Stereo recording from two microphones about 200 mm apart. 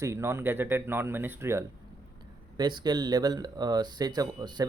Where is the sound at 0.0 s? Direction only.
15° right (ahead or behind).